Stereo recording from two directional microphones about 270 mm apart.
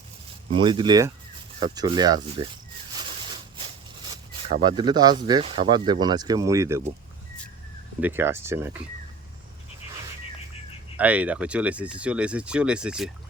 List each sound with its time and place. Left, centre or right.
0.6 s speech: centre
4.6 s speech: centre
8.0 s speech: centre
10.9 s speech: centre